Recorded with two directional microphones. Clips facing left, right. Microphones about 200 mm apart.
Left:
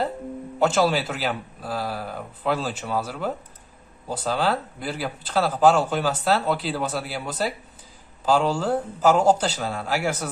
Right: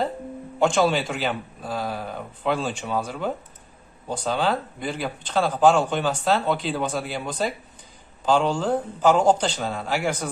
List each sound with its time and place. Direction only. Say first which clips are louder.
0.6 s a man's voice: even; 5° left (ahead or behind)